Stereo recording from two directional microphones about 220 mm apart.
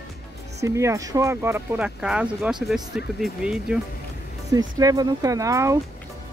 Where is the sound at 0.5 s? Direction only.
15° right (ahead or behind).